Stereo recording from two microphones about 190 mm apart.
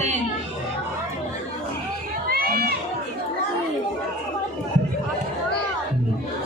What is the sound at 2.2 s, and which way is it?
Crowd, 50° right (ahead or behind).